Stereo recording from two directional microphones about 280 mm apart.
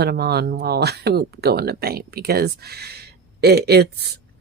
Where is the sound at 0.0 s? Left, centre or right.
Right.